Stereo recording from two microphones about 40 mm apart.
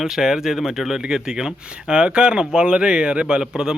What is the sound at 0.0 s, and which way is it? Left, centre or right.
A man's voice, centre.